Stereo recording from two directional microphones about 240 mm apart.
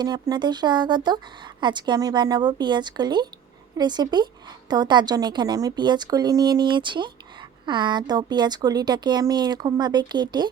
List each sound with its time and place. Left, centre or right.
0.0 s a woman's voice: centre